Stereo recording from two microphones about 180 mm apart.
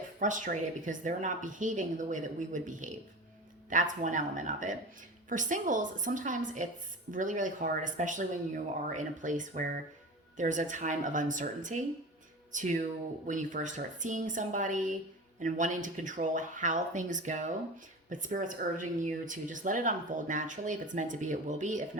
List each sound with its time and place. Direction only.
0.2 s speech: 45° right (ahead or behind)